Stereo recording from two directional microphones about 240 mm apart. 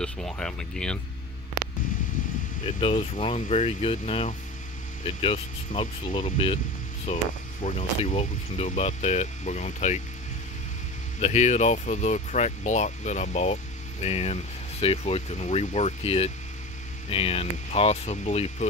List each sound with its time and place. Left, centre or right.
0.0 s speech: centre
2.6 s speech: left
11.1 s speech: left